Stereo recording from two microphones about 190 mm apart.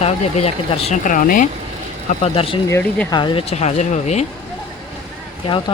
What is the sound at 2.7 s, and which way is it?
Speech, 10° left (ahead or behind).